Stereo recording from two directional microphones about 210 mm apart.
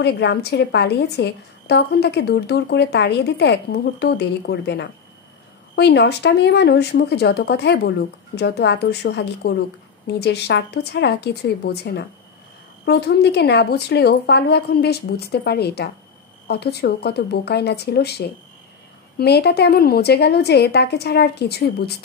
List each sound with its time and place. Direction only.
0.0 s a woman's voice: 50° left (ahead or behind)